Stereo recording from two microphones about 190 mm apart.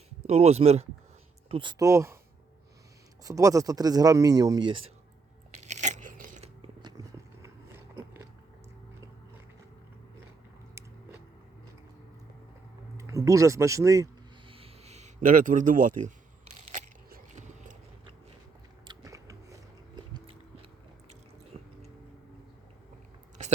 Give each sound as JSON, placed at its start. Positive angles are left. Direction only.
{"t": 0.3, "sound": "speech", "side_deg": -35}
{"t": 1.8, "sound": "speech", "side_deg": -15}
{"t": 3.2, "sound": "speech", "side_deg": -20}
{"t": 5.5, "sound": "crunch", "side_deg": -35}
{"t": 6.8, "sound": "biting", "side_deg": -20}
{"t": 13.0, "sound": "speech", "side_deg": -15}
{"t": 14.5, "sound": "a sound", "side_deg": -30}
{"t": 18.9, "sound": "biting", "side_deg": -15}
{"t": 21.5, "sound": "a sound", "side_deg": -30}